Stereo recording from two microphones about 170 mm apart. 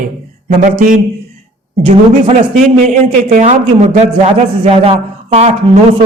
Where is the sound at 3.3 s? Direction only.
45° right (ahead or behind).